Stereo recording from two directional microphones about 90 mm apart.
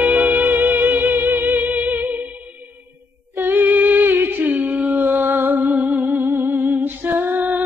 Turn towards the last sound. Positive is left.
turn(degrees=-20)  # may be behind; listen again after turning